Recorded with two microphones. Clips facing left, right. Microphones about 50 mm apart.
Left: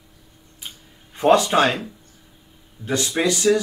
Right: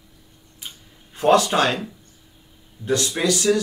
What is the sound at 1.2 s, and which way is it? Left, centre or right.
Speech, left.